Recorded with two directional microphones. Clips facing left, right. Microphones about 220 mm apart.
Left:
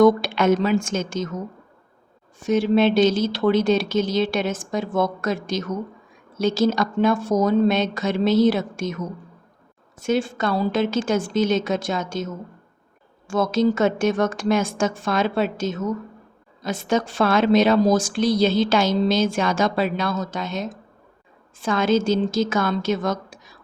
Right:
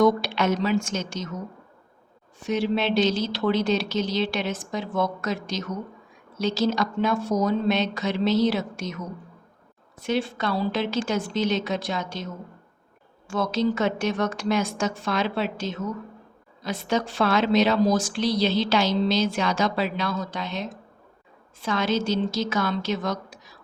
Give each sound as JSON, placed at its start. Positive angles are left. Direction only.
{"t": 0.0, "sound": "a woman's voice", "side_deg": 50}
{"t": 2.4, "sound": "a woman's voice", "side_deg": 45}
{"t": 10.0, "sound": "a woman's voice", "side_deg": 45}